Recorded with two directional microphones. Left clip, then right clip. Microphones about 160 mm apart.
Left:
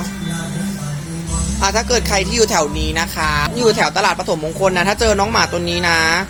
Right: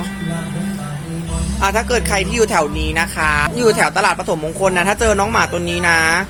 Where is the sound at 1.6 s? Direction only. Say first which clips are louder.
Even; centre (ahead or behind).